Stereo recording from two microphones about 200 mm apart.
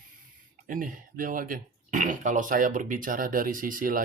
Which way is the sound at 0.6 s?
45° right (ahead or behind).